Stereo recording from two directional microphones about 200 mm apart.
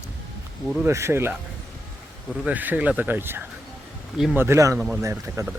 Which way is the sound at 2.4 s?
10° right (ahead or behind).